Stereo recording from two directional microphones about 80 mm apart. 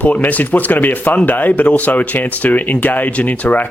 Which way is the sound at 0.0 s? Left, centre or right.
Centre.